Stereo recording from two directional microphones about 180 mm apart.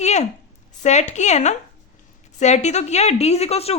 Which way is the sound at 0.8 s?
40° left (ahead or behind).